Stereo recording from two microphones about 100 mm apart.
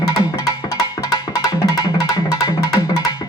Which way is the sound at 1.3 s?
40° left (ahead or behind).